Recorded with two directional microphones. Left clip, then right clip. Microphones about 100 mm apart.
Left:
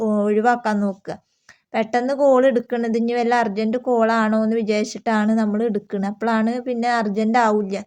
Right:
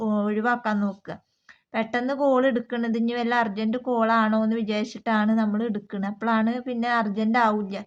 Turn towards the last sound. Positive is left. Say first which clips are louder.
# left 5 dB
turn(degrees=25)  # may be behind; listen again after turning